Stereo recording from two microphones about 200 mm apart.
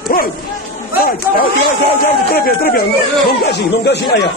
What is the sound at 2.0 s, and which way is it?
A man's voice, 50° left (ahead or behind).